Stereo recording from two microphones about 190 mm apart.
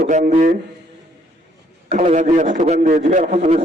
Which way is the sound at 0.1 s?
40° right (ahead or behind).